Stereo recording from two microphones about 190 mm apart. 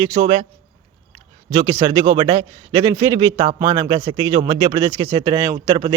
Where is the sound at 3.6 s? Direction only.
25° right (ahead or behind).